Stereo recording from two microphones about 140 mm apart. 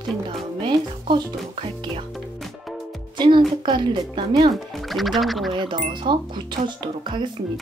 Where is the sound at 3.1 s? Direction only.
35° right (ahead or behind).